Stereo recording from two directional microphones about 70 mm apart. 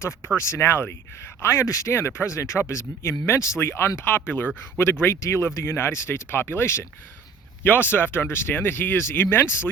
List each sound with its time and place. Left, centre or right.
0.3 s speech: left